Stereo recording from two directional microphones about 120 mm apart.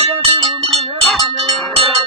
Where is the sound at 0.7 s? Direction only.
Centre (ahead or behind).